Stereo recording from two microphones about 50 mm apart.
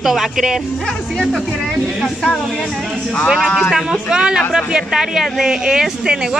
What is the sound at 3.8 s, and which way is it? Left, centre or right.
Speech, centre.